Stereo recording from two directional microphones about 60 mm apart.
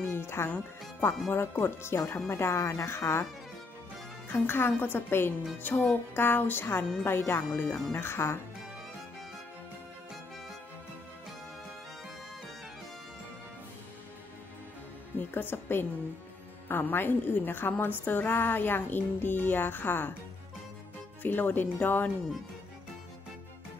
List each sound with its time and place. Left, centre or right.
0.0 s music: left
1.3 s speech: left
4.3 s a woman's voice: left
15.1 s a woman's voice: left
21.2 s a woman's voice: left